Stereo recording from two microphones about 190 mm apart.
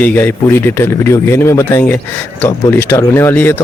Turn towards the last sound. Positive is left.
turn(degrees=15)  # may be behind; listen again after turning